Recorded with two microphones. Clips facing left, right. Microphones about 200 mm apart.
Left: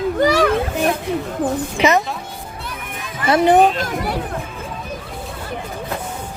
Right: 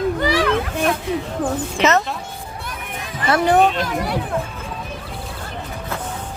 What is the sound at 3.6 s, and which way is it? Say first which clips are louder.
Speech: left 2 dB; centre (ahead or behind).